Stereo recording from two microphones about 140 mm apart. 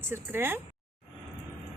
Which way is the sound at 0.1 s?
15° right (ahead or behind).